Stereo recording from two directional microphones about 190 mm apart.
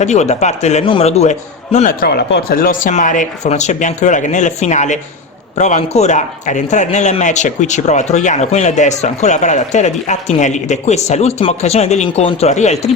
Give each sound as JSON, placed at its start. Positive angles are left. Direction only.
{"t": 0.0, "sound": "a man's voice", "side_deg": 35}
{"t": 2.0, "sound": "a man's voice", "side_deg": 60}